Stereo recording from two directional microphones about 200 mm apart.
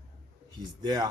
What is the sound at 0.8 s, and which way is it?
Speech, 20° right (ahead or behind).